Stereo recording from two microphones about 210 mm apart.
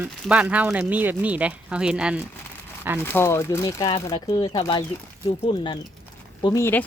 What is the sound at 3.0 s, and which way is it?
Speech, 10° left (ahead or behind).